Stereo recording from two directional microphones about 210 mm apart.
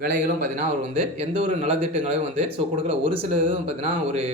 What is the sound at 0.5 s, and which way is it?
Speech, 30° right (ahead or behind).